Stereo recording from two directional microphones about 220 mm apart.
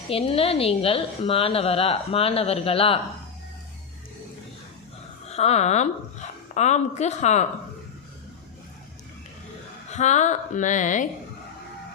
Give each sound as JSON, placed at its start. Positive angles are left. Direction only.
{"t": 0.1, "sound": "a woman's voice", "side_deg": 25}
{"t": 5.3, "sound": "a woman's voice", "side_deg": 30}
{"t": 9.9, "sound": "a woman's voice", "side_deg": 30}